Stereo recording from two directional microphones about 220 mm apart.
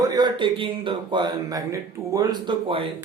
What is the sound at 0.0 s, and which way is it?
Speech, 20° right (ahead or behind).